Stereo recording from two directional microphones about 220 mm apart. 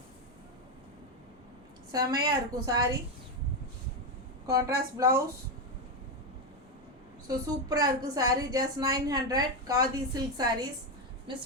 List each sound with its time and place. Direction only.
1.9 s a woman's voice: 15° right (ahead or behind)
4.4 s a woman's voice: 15° right (ahead or behind)
7.3 s a woman's voice: 15° right (ahead or behind)